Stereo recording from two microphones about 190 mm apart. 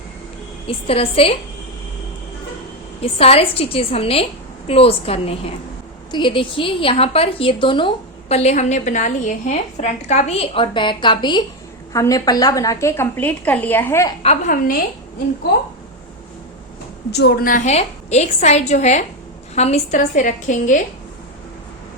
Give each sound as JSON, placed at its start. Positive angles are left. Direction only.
{"t": 0.9, "sound": "a woman's voice", "side_deg": 30}
{"t": 3.0, "sound": "a woman's voice", "side_deg": 30}
{"t": 14.2, "sound": "a woman's voice", "side_deg": 40}
{"t": 17.1, "sound": "a woman's voice", "side_deg": 60}